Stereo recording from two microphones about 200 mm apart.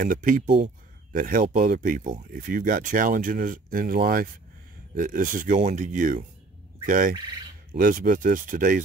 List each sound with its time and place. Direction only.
0.0 s speech: 40° right (ahead or behind)